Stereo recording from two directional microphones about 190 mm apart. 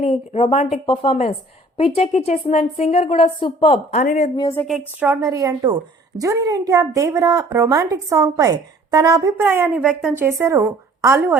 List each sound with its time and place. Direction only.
0.0 s a woman's voice: 35° left (ahead or behind)
4.0 s a woman's voice: 40° left (ahead or behind)
4.4 s a woman's voice: 15° left (ahead or behind)
4.9 s a woman's voice: 10° right (ahead or behind)